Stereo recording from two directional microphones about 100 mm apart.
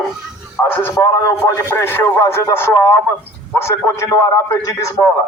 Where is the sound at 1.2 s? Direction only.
25° left (ahead or behind).